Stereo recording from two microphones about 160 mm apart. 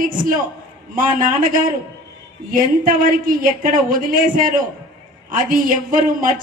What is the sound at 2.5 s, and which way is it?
Speech, 60° right (ahead or behind).